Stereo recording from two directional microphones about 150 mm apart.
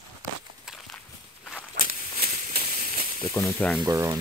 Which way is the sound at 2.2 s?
45° right (ahead or behind).